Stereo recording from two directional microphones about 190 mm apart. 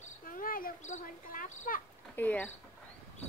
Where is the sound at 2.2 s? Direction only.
10° left (ahead or behind).